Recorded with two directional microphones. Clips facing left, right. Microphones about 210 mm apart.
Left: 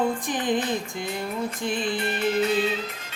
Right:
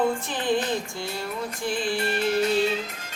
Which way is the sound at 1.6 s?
20° left (ahead or behind).